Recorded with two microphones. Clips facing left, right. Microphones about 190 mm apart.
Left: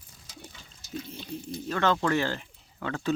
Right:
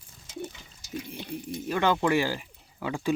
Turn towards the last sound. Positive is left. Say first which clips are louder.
# right 1 dB
turn(degrees=-10)  # may be behind; listen again after turning